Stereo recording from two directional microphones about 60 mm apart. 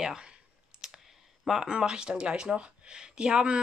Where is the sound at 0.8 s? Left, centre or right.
Centre.